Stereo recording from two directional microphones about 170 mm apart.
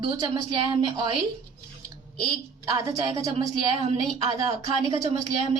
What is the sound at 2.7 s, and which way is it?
Speech, 20° right (ahead or behind).